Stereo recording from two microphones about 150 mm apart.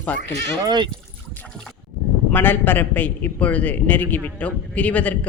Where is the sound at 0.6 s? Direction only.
30° right (ahead or behind).